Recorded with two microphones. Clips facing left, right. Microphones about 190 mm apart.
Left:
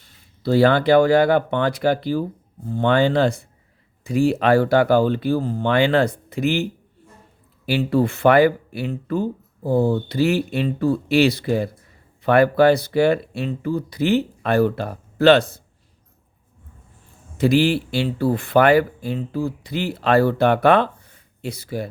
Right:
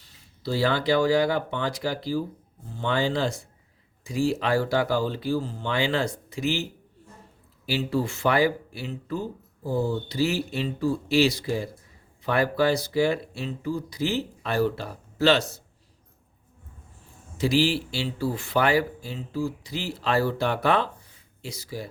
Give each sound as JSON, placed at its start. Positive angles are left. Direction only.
{"t": 0.0, "sound": "speech", "side_deg": 55}
{"t": 17.3, "sound": "speech", "side_deg": 55}